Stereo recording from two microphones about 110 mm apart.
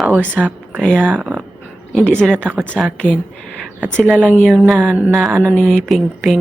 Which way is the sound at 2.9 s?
10° left (ahead or behind).